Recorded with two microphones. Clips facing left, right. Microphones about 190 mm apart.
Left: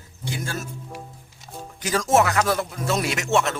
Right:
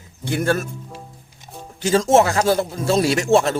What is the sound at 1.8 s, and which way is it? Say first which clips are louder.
A man's voice: right 5 dB; 25° right (ahead or behind).